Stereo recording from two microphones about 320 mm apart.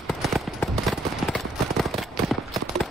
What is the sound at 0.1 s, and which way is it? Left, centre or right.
Clip-clop, centre.